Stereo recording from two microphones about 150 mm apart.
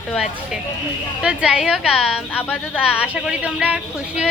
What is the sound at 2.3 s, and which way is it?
Speech, 10° left (ahead or behind).